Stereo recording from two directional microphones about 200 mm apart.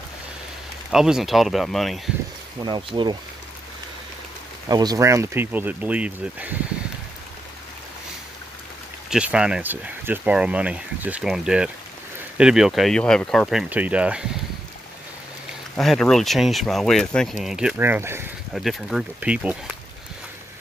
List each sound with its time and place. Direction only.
0.9 s speech: centre (ahead or behind)
2.6 s speech: 25° right (ahead or behind)
4.6 s speech: 20° right (ahead or behind)
9.1 s speech: 5° right (ahead or behind)
15.7 s speech: centre (ahead or behind)
18.5 s speech: centre (ahead or behind)